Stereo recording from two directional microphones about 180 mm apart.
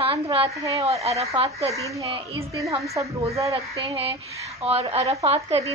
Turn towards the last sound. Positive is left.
turn(degrees=-35)  # may be behind; listen again after turning